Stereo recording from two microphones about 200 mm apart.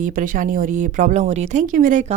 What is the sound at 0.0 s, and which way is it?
Speech, 40° right (ahead or behind).